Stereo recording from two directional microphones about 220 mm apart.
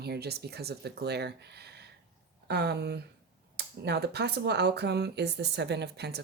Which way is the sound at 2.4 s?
50° right (ahead or behind).